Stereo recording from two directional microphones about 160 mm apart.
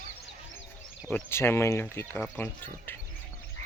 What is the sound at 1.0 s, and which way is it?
Speech, 15° left (ahead or behind).